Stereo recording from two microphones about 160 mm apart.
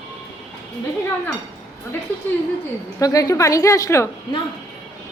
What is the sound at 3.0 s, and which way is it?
A woman's voice, 20° left (ahead or behind).